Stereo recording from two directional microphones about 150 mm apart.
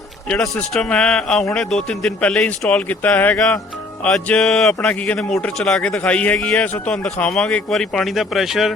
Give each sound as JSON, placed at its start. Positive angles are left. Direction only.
{"t": 0.3, "sound": "speech", "side_deg": 5}